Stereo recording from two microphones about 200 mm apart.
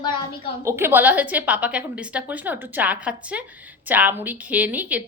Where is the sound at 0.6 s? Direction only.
15° right (ahead or behind).